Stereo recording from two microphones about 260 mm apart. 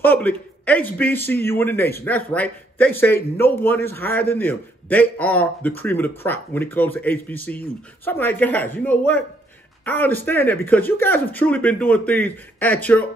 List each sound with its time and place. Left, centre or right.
0.0 s a man's voice: centre